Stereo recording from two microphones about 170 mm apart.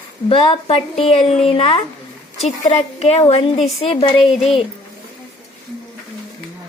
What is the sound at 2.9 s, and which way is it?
A woman's voice, 40° left (ahead or behind).